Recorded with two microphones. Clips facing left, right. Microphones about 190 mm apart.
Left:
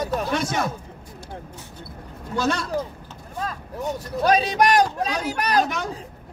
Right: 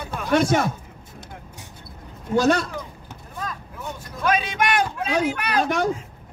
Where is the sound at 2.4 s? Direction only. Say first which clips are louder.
Right 5 dB; 50° right (ahead or behind).